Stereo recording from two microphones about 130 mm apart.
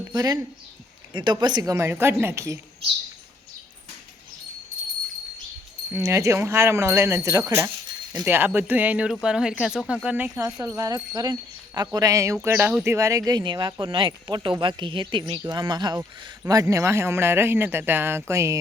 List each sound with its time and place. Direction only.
0.1 s speech: 30° right (ahead or behind)
5.9 s speech: 20° right (ahead or behind)
10.8 s speech: 30° right (ahead or behind)